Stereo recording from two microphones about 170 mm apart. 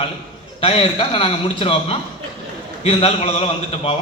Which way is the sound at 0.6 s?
30° left (ahead or behind).